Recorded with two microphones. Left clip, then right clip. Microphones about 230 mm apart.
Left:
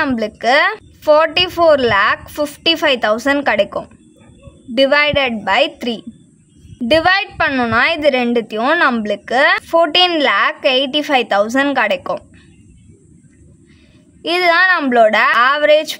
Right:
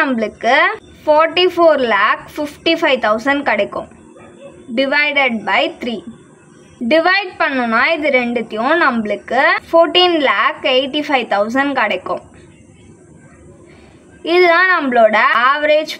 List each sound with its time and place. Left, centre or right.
0.0 s a woman's voice: left
14.2 s a woman's voice: left